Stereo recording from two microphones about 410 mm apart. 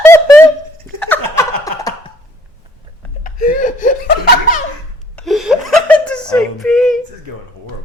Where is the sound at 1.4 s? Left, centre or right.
Centre.